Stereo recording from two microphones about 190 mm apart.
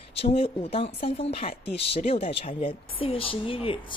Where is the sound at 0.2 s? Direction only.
30° left (ahead or behind).